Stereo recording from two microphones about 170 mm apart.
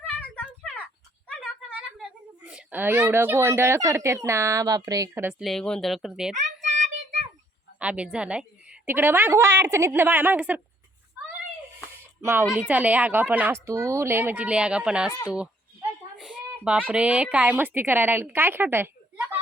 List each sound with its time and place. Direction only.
2.0 s a woman's voice: 5° right (ahead or behind)
6.3 s child singing: 45° right (ahead or behind)
7.8 s a woman's voice: 5° right (ahead or behind)
11.9 s a sound: 15° right (ahead or behind)
12.5 s a woman's voice: 10° right (ahead or behind)
16.1 s a woman's voice: 5° right (ahead or behind)